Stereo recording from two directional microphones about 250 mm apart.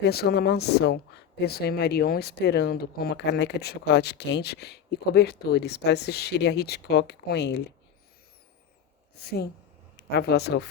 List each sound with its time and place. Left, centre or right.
0.0 s speech: left
10.0 s speech: left